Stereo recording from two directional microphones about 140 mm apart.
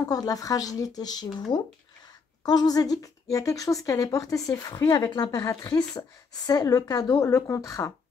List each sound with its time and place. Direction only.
0.0 s speech: 25° left (ahead or behind)
2.4 s speech: 30° left (ahead or behind)